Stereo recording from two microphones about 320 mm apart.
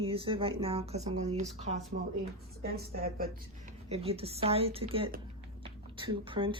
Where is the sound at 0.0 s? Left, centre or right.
Centre.